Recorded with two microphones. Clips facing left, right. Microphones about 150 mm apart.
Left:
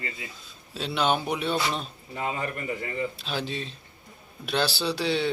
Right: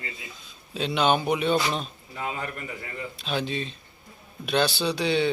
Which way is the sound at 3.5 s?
65° right (ahead or behind).